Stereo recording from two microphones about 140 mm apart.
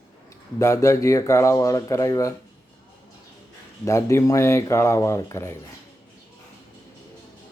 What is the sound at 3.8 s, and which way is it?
Speech, 20° left (ahead or behind).